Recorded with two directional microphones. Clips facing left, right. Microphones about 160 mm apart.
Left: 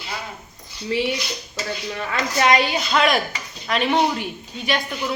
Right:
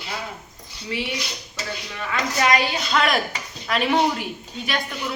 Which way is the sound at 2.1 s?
30° left (ahead or behind).